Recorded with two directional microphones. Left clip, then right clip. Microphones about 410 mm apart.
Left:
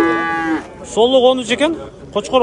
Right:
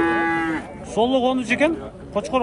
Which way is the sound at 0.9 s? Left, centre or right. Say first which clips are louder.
Left 8 dB; centre.